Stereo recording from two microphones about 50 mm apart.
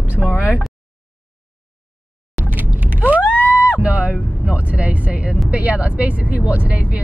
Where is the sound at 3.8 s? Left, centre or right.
Right.